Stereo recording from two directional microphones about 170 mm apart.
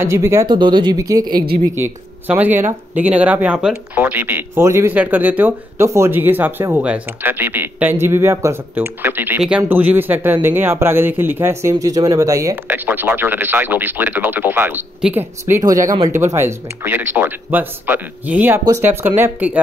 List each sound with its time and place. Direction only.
0.0 s speech: 15° right (ahead or behind)
0.5 s speech: 25° right (ahead or behind)
2.2 s speech: 10° right (ahead or behind)